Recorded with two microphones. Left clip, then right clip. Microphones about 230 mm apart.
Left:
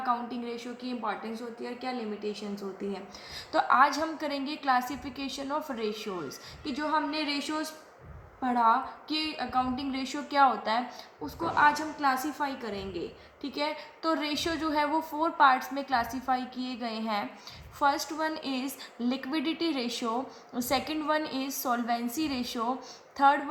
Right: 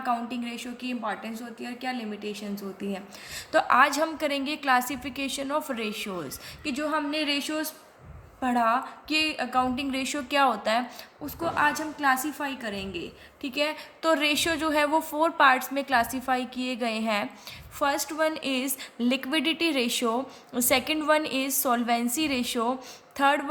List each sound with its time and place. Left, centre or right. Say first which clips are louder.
0.0 s a woman's voice: right 2 dB; right